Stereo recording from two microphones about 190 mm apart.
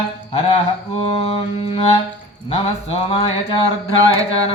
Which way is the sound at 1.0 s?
30° left (ahead or behind).